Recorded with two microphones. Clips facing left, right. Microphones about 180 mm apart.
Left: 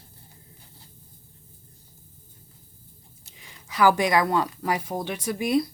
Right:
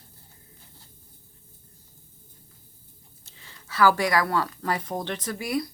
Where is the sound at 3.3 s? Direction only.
15° left (ahead or behind).